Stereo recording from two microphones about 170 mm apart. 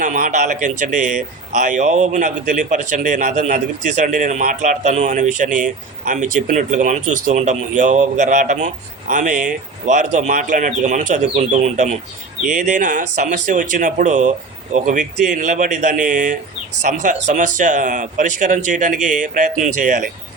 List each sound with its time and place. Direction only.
0.0 s speech: 50° right (ahead or behind)